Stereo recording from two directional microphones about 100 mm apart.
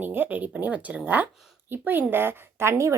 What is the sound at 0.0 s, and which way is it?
A woman's voice, 20° right (ahead or behind).